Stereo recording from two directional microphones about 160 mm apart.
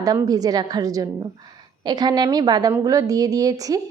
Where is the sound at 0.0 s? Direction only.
25° right (ahead or behind).